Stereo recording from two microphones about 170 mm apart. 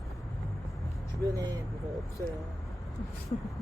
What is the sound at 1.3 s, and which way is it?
Speech, 20° right (ahead or behind).